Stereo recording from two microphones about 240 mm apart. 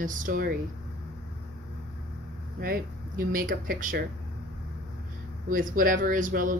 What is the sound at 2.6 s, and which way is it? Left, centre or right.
Speech, right.